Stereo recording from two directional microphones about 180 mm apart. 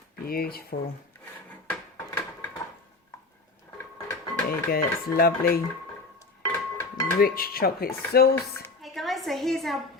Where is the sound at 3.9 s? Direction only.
20° left (ahead or behind).